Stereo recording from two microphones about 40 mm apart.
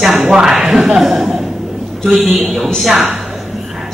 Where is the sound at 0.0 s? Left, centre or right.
Centre.